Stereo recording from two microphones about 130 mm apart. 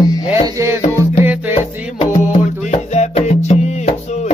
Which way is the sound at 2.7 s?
60° left (ahead or behind).